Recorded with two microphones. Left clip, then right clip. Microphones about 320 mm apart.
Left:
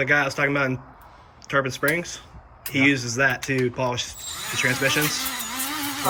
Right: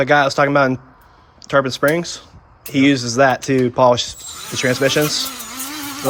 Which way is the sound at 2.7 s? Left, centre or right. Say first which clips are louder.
Right 5 dB; centre.